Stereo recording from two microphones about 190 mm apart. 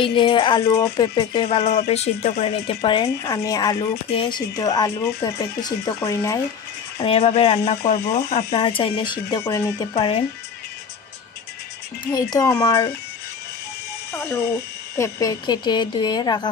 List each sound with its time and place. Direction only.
0.0 s speech: 25° left (ahead or behind)
7.0 s speech: 30° left (ahead or behind)
7.9 s speech: 60° left (ahead or behind)
8.5 s speech: 25° left (ahead or behind)
12.1 s speech: 20° left (ahead or behind)
14.1 s speech: 15° left (ahead or behind)